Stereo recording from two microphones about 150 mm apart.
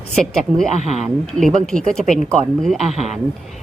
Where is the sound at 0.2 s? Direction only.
5° left (ahead or behind).